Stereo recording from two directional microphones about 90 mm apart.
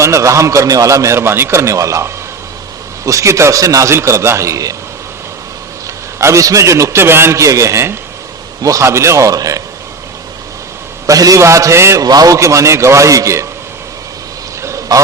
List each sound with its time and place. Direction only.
0.0 s a man's voice: 35° right (ahead or behind)
6.1 s a man's voice: 35° right (ahead or behind)
11.0 s a man's voice: 40° right (ahead or behind)
12.0 s a man's voice: 45° right (ahead or behind)
14.6 s duck: 35° right (ahead or behind)